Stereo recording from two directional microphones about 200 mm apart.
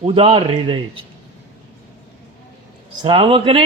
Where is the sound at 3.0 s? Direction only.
25° right (ahead or behind).